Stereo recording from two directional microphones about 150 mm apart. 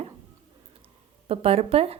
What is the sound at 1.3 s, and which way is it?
Speech, 40° right (ahead or behind).